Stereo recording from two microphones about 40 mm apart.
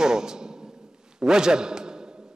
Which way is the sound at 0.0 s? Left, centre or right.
Centre.